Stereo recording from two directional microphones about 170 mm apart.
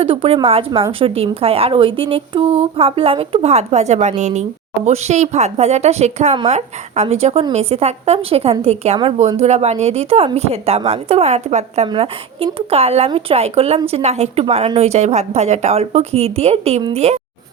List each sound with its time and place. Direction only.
0.0 s speech: 30° right (ahead or behind)